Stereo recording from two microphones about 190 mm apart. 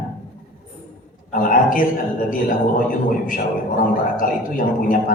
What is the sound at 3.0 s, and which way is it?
A man's voice, 45° left (ahead or behind).